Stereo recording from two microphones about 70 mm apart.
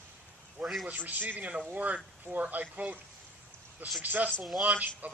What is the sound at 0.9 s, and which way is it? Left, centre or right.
A man's voice, right.